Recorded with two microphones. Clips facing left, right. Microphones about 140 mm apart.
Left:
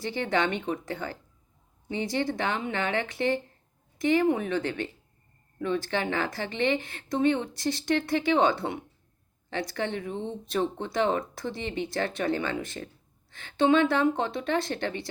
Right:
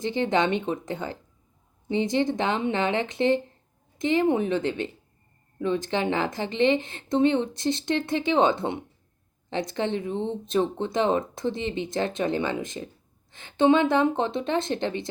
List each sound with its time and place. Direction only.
0.0 s speech: 20° right (ahead or behind)